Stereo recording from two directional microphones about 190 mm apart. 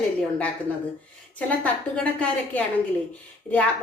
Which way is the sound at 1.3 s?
5° left (ahead or behind).